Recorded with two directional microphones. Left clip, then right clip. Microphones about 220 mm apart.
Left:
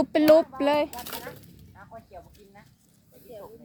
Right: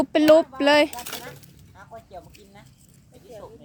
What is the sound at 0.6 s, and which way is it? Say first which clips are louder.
Speech: right 6 dB; 20° right (ahead or behind).